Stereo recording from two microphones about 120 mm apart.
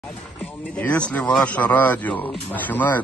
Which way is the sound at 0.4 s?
10° left (ahead or behind).